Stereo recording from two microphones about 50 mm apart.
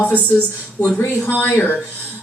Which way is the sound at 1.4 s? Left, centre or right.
Left.